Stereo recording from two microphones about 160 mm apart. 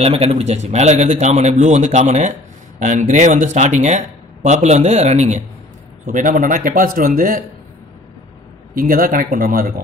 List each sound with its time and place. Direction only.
0.0 s speech: 40° right (ahead or behind)
6.0 s speech: 55° right (ahead or behind)
8.7 s speech: 60° right (ahead or behind)